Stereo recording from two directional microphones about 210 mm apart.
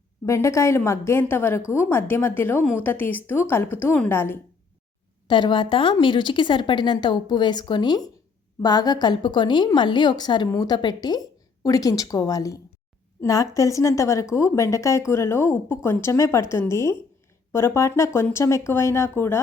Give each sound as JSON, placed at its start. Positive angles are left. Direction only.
{"t": 0.3, "sound": "a woman's voice", "side_deg": 15}
{"t": 5.3, "sound": "a woman's voice", "side_deg": 20}